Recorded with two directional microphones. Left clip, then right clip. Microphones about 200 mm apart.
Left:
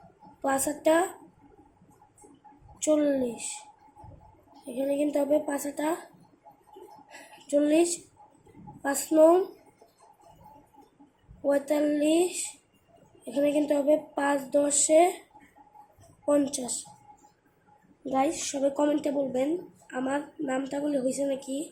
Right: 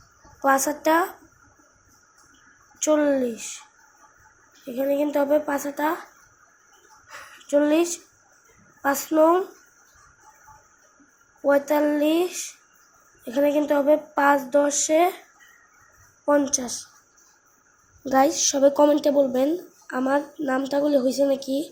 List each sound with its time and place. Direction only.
0.4 s speech: 15° right (ahead or behind)
2.7 s speech: 10° right (ahead or behind)
4.7 s speech: 10° right (ahead or behind)
7.1 s a sound: 5° right (ahead or behind)
8.8 s speech: 10° right (ahead or behind)
11.4 s speech: 10° right (ahead or behind)
16.2 s speech: 10° right (ahead or behind)
18.1 s a woman's voice: 20° right (ahead or behind)